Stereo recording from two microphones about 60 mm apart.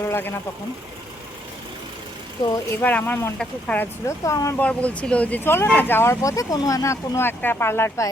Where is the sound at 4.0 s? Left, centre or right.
Left.